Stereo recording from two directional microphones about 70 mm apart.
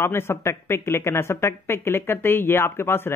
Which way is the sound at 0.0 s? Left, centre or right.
Left.